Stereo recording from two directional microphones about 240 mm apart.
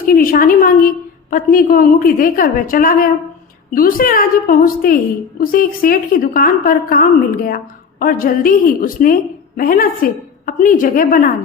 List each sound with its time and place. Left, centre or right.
0.0 s a woman's voice: left